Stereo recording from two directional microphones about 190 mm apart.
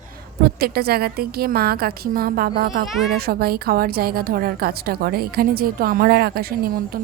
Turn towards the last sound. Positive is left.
turn(degrees=-50)  # may be behind; listen again after turning